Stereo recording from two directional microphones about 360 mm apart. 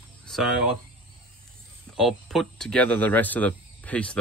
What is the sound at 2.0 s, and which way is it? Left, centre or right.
Speech, centre.